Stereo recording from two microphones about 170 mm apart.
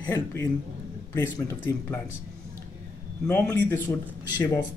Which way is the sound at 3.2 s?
10° left (ahead or behind).